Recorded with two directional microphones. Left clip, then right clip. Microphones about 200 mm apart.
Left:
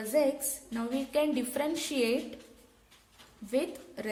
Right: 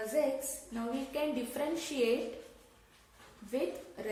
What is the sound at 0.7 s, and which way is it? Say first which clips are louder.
A woman's voice: left 6 dB; 40° left (ahead or behind).